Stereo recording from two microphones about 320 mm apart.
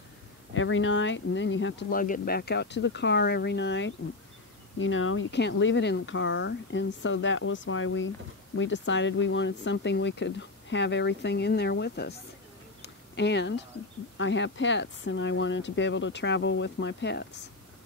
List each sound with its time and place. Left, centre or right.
0.6 s speech: left